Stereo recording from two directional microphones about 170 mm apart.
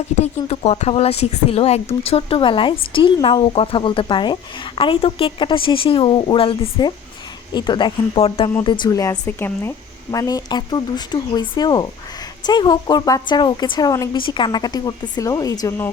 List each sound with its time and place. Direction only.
0.2 s speech: 35° left (ahead or behind); by 15.9 s 20° left (ahead or behind)